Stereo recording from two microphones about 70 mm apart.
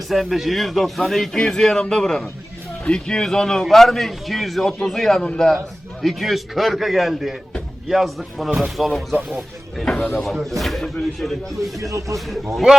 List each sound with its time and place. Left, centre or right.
0.1 s a man's voice: centre
9.8 s speech: centre
10.6 s a man's voice: centre
11.8 s speech: right